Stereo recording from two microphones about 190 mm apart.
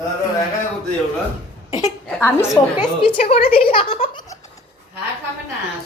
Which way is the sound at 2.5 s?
25° left (ahead or behind).